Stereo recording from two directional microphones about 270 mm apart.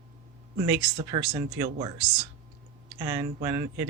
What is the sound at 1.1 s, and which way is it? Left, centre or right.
Speech, centre.